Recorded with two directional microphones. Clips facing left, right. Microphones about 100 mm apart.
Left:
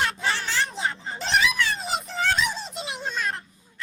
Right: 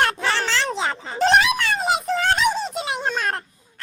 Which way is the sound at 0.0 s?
75° right (ahead or behind).